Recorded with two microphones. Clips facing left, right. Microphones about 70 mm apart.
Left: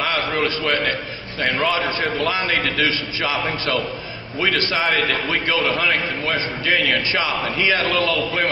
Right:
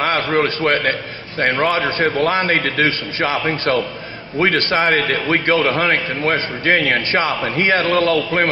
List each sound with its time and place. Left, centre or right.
0.0 s a man's voice: right